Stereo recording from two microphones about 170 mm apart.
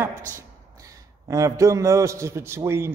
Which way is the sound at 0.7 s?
20° right (ahead or behind).